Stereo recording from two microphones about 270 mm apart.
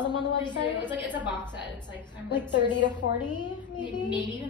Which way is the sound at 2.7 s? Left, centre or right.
Left.